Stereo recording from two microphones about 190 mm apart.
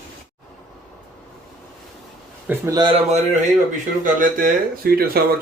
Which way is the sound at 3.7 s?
45° right (ahead or behind).